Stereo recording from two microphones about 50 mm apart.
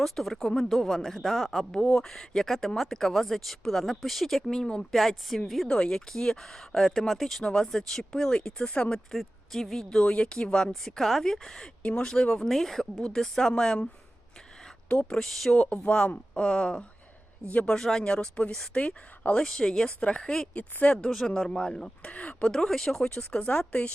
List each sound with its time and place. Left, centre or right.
0.0 s speech: centre
5.6 s speech: centre
9.1 s speech: centre
10.0 s speech: centre
10.7 s speech: centre
14.8 s speech: left
15.2 s speech: centre
15.5 s speech: left
17.7 s speech: centre
18.0 s speech: centre
21.1 s speech: centre
22.1 s speech: left
22.5 s speech: centre